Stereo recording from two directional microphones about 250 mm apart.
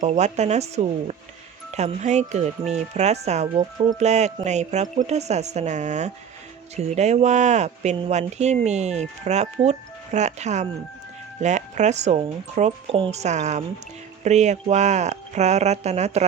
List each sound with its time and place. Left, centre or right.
0.0 s speech: right